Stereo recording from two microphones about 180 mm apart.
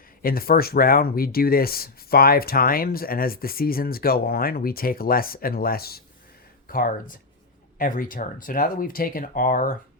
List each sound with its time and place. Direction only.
0.2 s speech: 55° left (ahead or behind)